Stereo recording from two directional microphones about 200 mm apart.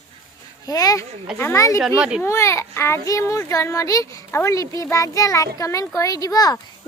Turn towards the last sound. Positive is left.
turn(degrees=20)  # may be behind; listen again after turning